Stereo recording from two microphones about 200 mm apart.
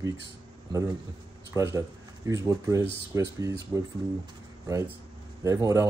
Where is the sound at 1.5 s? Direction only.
15° right (ahead or behind).